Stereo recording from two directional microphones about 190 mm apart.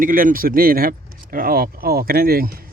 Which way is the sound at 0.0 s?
45° right (ahead or behind).